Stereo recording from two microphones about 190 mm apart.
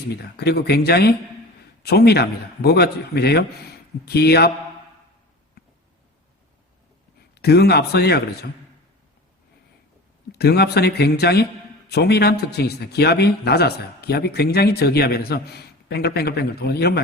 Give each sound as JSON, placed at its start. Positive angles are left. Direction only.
{"t": 0.1, "sound": "a man's voice", "side_deg": 60}
{"t": 7.3, "sound": "a man's voice", "side_deg": 55}
{"t": 10.3, "sound": "a man's voice", "side_deg": 60}